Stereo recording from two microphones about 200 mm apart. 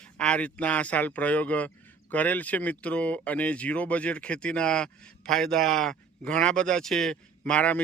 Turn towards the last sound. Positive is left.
turn(degrees=5)  # may be behind; listen again after turning